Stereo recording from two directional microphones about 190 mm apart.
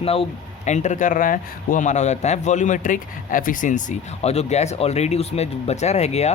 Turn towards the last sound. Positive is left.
turn(degrees=35)  # may be behind; listen again after turning